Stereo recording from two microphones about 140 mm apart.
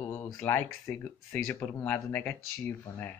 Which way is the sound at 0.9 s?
20° left (ahead or behind).